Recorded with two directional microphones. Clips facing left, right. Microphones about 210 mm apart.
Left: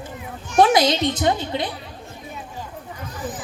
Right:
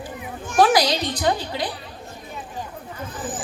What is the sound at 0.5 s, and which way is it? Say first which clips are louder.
A woman's voice: left 2 dB; 25° left (ahead or behind).